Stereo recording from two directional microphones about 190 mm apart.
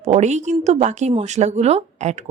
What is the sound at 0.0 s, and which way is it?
Speech, 35° right (ahead or behind).